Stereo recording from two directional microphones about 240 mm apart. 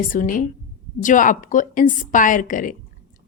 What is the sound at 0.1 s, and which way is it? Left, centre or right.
A woman's voice, left.